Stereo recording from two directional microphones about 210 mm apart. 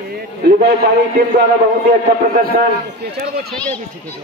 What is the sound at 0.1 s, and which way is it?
Speech, 50° right (ahead or behind).